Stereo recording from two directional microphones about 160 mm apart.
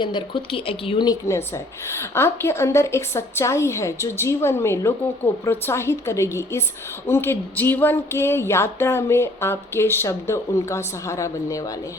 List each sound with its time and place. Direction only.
0.0 s speech: 30° left (ahead or behind)